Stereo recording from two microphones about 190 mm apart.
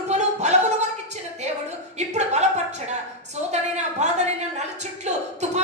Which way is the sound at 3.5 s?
35° right (ahead or behind).